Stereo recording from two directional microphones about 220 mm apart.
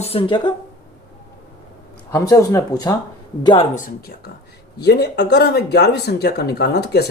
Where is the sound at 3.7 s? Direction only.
40° left (ahead or behind).